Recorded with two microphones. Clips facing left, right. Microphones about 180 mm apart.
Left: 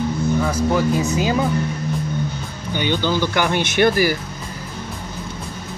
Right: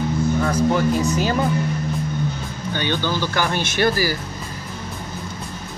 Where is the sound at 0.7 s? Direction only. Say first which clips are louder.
Left 1 dB; 5° left (ahead or behind).